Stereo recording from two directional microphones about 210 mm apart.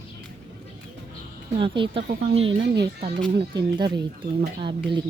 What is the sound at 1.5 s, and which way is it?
Speech, 25° right (ahead or behind).